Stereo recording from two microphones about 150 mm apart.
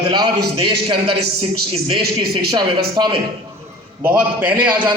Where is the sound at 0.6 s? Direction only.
35° right (ahead or behind).